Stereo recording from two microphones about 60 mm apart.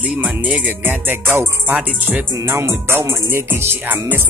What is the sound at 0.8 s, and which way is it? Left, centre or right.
Music, right.